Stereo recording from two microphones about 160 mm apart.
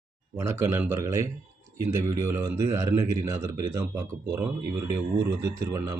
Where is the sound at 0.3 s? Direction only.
15° right (ahead or behind).